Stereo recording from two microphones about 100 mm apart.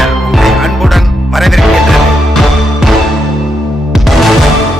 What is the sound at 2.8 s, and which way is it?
Music, 5° right (ahead or behind).